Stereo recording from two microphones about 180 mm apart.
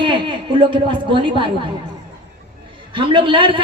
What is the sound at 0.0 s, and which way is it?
A man's voice, 25° right (ahead or behind).